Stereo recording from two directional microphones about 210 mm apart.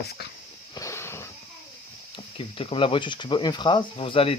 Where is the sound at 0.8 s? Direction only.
15° left (ahead or behind).